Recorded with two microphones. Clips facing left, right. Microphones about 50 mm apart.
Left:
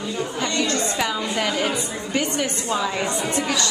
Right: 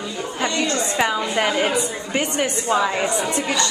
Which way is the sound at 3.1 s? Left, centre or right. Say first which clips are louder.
Right 1 dB; centre.